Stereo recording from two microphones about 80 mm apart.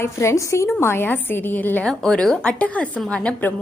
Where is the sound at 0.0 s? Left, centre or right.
Left.